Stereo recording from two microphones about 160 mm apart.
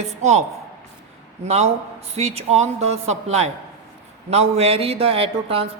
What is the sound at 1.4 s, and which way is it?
A woman's voice, 40° right (ahead or behind).